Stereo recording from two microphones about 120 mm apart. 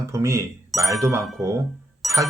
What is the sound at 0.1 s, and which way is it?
Speech, 25° right (ahead or behind).